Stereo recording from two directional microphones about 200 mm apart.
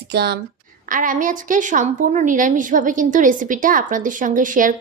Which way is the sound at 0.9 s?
40° right (ahead or behind).